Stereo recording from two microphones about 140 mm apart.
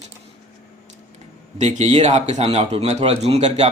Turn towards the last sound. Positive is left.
turn(degrees=-50)  # may be behind; listen again after turning